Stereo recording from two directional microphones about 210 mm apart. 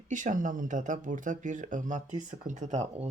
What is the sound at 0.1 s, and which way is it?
Speech, 40° right (ahead or behind).